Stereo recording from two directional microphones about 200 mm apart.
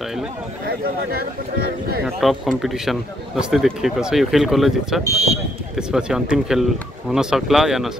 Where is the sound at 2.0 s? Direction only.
Centre (ahead or behind).